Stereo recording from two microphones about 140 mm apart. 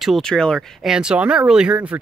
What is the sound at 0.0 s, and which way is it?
Speech, centre (ahead or behind).